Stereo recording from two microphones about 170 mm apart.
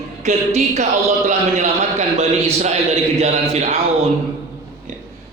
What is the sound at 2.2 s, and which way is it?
A man's voice, 40° right (ahead or behind).